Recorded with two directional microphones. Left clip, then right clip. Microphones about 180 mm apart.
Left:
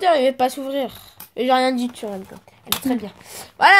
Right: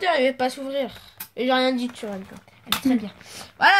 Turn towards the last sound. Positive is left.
turn(degrees=50)  # may be behind; listen again after turning